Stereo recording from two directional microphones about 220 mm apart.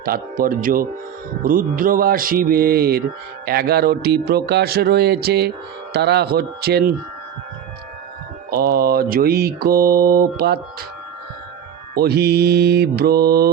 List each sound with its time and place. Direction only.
0.0 s speech: 40° right (ahead or behind)
3.4 s mantra: 45° right (ahead or behind)
8.4 s mantra: 45° right (ahead or behind)
11.9 s mantra: 45° right (ahead or behind)